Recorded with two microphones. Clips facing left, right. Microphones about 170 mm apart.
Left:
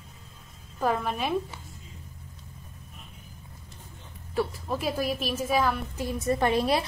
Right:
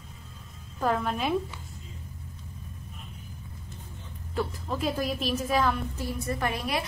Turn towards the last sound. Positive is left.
turn(degrees=30)  # may be behind; listen again after turning